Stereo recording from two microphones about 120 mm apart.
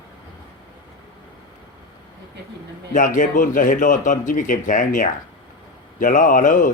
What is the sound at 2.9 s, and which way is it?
A man's voice, 90° left.